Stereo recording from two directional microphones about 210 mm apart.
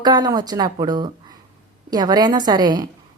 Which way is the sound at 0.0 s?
20° right (ahead or behind).